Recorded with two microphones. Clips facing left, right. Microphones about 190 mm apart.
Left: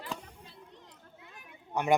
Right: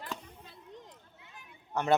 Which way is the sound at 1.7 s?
15° left (ahead or behind).